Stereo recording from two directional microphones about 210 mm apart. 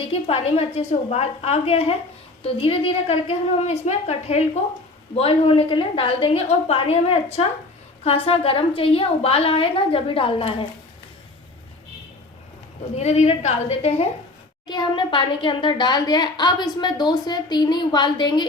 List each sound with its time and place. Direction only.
0.1 s a woman's voice: 30° left (ahead or behind)
13.0 s a woman's voice: 30° left (ahead or behind)